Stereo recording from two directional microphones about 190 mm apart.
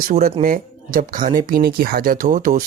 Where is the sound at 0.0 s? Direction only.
50° right (ahead or behind).